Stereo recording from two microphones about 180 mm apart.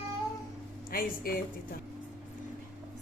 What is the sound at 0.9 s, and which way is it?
Speech, 55° left (ahead or behind).